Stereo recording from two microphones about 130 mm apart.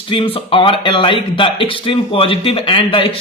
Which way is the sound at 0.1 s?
45° left (ahead or behind).